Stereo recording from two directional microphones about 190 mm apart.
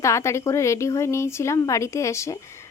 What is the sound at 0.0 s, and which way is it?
Speech, 15° left (ahead or behind).